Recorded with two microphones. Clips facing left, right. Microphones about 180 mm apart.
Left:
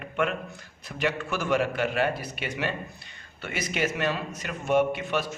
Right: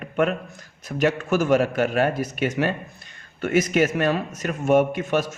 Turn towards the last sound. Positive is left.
turn(degrees=-45)  # may be behind; listen again after turning